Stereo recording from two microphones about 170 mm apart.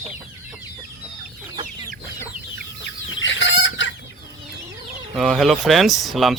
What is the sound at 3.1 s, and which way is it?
Chicken, 90° left.